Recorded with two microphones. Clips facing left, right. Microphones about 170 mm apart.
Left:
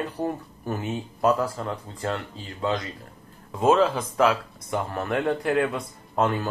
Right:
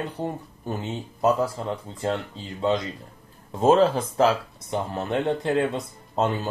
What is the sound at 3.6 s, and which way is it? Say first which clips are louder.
Speech: right 2 dB; 30° right (ahead or behind).